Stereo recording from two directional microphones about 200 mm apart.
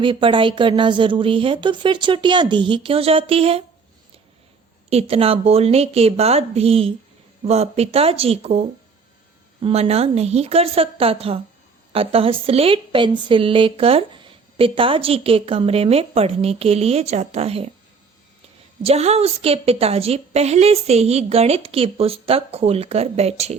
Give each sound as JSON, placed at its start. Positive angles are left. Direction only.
{"t": 0.0, "sound": "a woman's voice", "side_deg": -25}
{"t": 4.9, "sound": "a woman's voice", "side_deg": -30}
{"t": 9.6, "sound": "a woman's voice", "side_deg": -30}
{"t": 18.8, "sound": "a woman's voice", "side_deg": -30}